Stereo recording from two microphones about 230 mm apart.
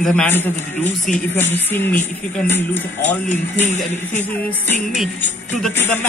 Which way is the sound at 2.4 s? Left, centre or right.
Centre.